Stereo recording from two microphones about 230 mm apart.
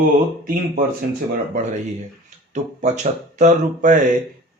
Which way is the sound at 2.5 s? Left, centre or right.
Right.